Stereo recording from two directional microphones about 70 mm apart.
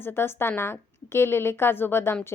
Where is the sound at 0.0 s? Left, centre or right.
Left.